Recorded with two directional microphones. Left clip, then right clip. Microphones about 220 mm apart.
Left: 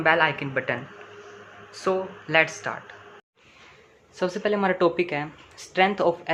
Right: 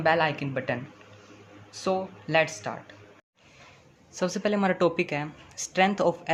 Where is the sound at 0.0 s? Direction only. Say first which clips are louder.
Left 3 dB; 20° right (ahead or behind).